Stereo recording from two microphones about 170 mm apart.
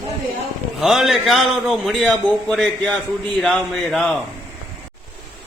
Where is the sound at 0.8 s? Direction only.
Centre (ahead or behind).